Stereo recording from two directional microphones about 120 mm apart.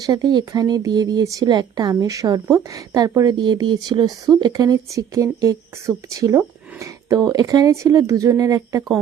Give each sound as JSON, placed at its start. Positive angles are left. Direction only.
{"t": 0.0, "sound": "speech", "side_deg": -35}